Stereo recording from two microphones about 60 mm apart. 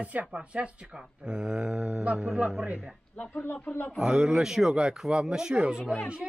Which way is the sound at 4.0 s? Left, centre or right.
Centre.